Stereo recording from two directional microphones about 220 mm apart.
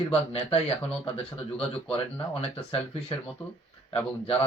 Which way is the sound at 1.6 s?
5° left (ahead or behind).